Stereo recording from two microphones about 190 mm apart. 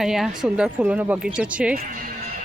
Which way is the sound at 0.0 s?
Centre (ahead or behind).